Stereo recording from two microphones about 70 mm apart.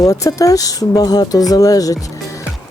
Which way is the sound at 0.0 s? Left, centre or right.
Left.